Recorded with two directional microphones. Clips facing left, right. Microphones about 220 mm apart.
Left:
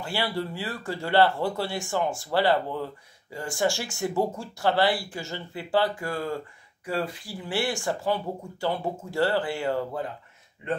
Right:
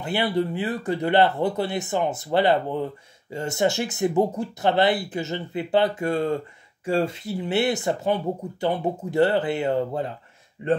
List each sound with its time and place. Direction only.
0.0 s speech: 20° right (ahead or behind)
10.6 s a man's voice: 35° right (ahead or behind)